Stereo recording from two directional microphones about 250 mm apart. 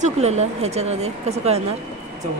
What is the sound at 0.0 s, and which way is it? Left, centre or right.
A woman's voice, right.